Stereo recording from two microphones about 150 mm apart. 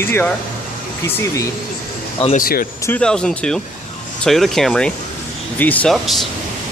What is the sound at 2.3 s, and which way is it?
Speech, 70° left (ahead or behind).